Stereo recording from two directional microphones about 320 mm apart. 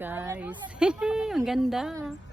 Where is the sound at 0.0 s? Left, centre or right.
Centre.